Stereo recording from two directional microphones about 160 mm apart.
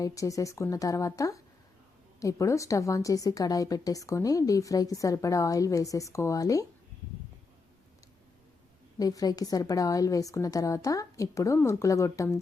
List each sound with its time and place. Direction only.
0.0 s a woman's voice: 20° left (ahead or behind)
9.0 s a woman's voice: 25° left (ahead or behind)